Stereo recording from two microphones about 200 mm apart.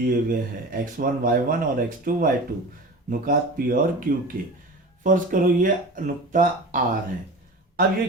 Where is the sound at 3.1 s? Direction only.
45° right (ahead or behind).